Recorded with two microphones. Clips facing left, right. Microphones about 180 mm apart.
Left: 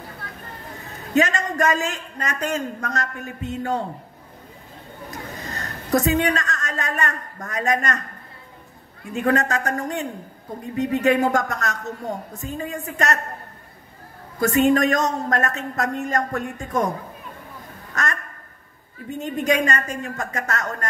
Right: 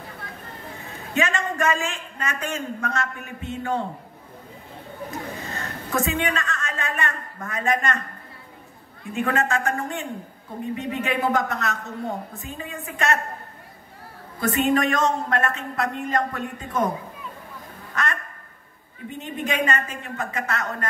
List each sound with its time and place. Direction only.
0.7 s a man's voice: 40° left (ahead or behind)
5.4 s a woman's voice: 40° left (ahead or behind)
9.1 s a man's voice: 40° left (ahead or behind)
14.4 s a woman's voice: 45° left (ahead or behind)
17.9 s a man's voice: 40° left (ahead or behind)